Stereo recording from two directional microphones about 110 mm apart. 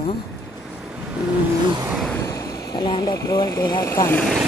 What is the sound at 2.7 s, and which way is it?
Speech, 50° left (ahead or behind).